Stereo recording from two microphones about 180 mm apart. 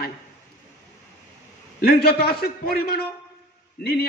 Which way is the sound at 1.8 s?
60° left (ahead or behind).